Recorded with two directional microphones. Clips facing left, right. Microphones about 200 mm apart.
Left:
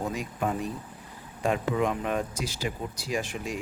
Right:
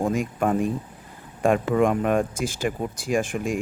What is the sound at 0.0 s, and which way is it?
Speech, 50° right (ahead or behind).